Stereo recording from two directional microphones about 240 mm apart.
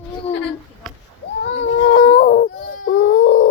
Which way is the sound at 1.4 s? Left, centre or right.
Left.